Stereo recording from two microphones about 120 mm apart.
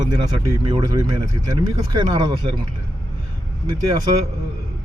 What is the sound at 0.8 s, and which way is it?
Speech, 30° right (ahead or behind).